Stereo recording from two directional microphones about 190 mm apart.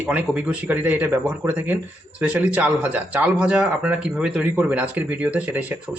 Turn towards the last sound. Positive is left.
turn(degrees=-10)  # may be behind; listen again after turning